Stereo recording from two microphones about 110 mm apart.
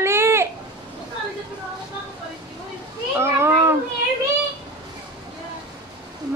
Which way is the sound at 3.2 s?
25° right (ahead or behind).